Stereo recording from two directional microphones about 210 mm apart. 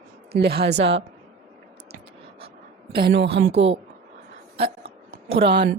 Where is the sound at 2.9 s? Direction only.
50° right (ahead or behind).